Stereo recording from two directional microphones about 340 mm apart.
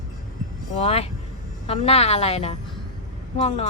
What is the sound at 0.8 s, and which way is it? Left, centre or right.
A woman's voice, centre.